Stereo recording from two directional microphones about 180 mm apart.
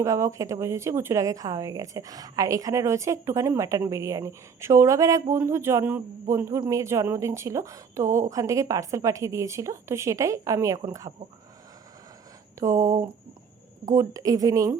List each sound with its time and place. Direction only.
0.0 s speech: 15° right (ahead or behind)
12.5 s a woman's voice: 15° right (ahead or behind)